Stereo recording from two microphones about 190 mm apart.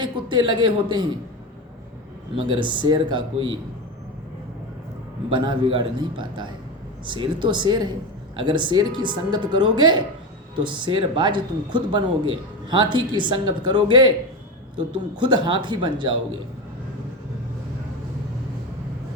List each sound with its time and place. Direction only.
0.0 s speech: 25° right (ahead or behind)
2.5 s speech: 25° right (ahead or behind)
5.3 s speech: 25° right (ahead or behind)
15.2 s speech: 25° right (ahead or behind)